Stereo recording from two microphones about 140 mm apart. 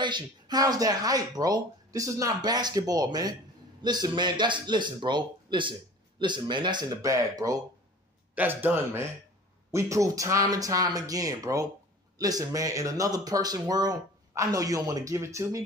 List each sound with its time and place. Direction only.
0.0 s speech: 30° right (ahead or behind)
8.4 s a man's voice: 15° right (ahead or behind)